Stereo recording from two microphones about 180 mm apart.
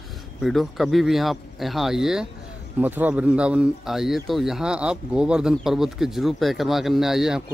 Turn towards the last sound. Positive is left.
turn(degrees=0)  # may be behind; listen again after turning